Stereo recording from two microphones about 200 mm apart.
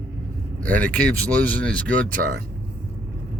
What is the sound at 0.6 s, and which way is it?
Speech, 10° left (ahead or behind).